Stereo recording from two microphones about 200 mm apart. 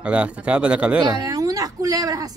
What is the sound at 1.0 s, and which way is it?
Speech, 20° right (ahead or behind).